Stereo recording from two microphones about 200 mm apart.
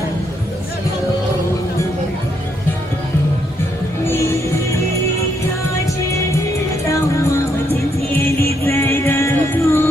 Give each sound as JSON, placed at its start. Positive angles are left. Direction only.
{"t": 4.0, "sound": "music", "side_deg": 15}
{"t": 8.6, "sound": "music", "side_deg": 15}